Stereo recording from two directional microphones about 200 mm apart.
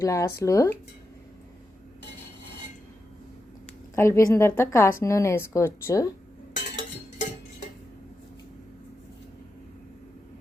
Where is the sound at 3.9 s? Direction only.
15° left (ahead or behind).